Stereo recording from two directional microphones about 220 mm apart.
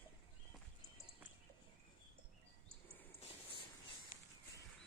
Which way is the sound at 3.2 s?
25° left (ahead or behind).